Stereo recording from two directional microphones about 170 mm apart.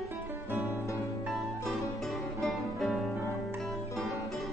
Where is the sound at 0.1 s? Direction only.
10° right (ahead or behind).